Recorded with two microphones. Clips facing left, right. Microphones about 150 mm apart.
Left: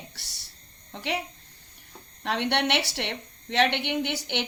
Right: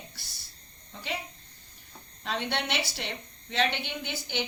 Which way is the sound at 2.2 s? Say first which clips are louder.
Left 6 dB; 65° left (ahead or behind).